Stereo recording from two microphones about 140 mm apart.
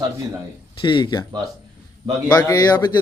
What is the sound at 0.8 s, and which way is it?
Speech, 35° left (ahead or behind).